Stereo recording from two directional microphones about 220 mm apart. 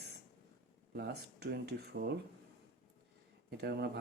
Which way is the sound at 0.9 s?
50° right (ahead or behind).